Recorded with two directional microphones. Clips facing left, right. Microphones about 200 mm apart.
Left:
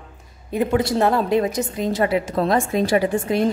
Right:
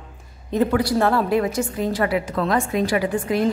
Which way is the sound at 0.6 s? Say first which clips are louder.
Left 3 dB; 25° left (ahead or behind).